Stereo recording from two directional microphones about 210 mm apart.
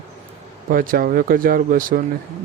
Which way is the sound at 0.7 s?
40° right (ahead or behind).